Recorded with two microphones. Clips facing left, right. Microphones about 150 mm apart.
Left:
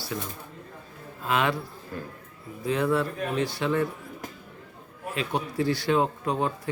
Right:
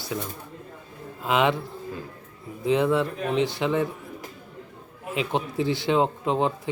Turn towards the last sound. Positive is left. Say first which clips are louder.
# right 3 dB
turn(degrees=-20)  # may be behind; listen again after turning